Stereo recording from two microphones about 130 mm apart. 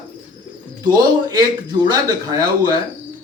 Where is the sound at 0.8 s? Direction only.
30° right (ahead or behind).